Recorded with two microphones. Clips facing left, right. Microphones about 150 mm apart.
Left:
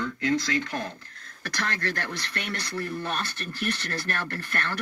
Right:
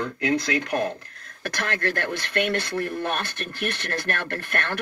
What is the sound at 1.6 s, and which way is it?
Speech, 55° right (ahead or behind).